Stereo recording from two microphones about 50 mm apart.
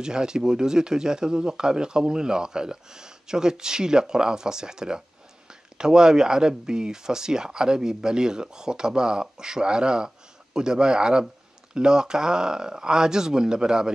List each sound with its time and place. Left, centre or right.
0.0 s speech: centre